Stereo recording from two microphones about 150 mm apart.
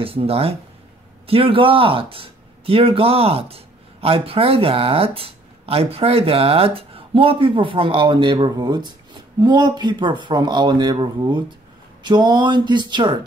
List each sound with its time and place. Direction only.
0.0 s speech: 40° right (ahead or behind)